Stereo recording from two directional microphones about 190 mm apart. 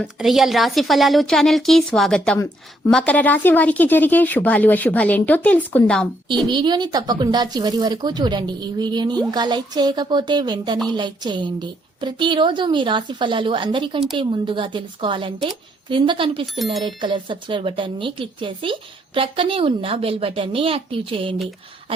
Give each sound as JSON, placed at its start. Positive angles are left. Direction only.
{"t": 0.0, "sound": "a woman's voice", "side_deg": 0}
{"t": 6.5, "sound": "speech", "side_deg": -25}